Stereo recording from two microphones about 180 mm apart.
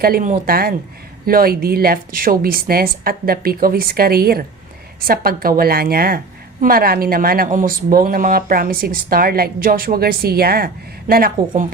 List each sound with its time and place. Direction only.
0.0 s a woman's voice: 50° right (ahead or behind)